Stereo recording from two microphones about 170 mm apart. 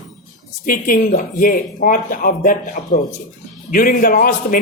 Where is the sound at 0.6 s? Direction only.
55° left (ahead or behind).